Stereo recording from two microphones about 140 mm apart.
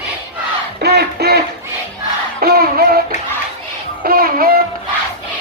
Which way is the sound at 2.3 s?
90° right.